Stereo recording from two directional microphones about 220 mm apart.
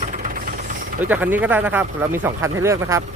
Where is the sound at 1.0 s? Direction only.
10° right (ahead or behind).